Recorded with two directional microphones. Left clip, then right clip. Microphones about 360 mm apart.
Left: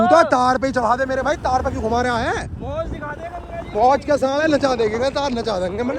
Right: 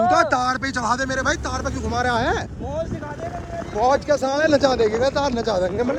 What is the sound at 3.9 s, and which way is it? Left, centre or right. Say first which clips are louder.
Speech: left 2 dB; centre.